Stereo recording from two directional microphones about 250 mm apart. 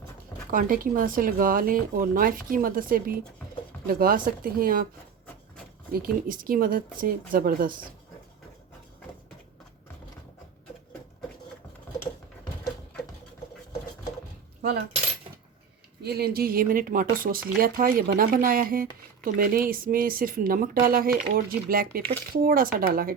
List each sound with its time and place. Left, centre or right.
0.5 s speech: right
5.9 s speech: right
16.0 s speech: right